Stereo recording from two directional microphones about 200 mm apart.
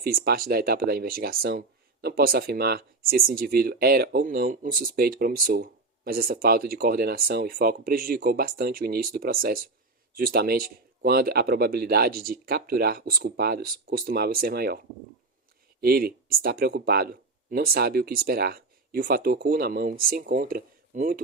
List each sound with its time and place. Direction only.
0.0 s speech: 50° right (ahead or behind)
15.8 s speech: 50° right (ahead or behind)